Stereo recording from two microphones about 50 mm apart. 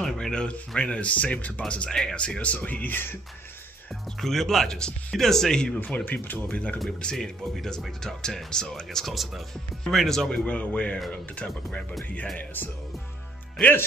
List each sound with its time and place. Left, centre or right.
0.0 s speech: centre; by 1.5 s left
1.9 s speech: centre
2.1 s speech: left
4.2 s speech: centre
6.0 s speech: left
7.0 s speech: centre
8.8 s speech: centre
9.8 s speech: centre
10.4 s speech: left
13.6 s speech: centre